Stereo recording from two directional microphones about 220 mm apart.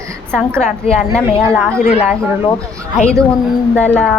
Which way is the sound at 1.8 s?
30° left (ahead or behind).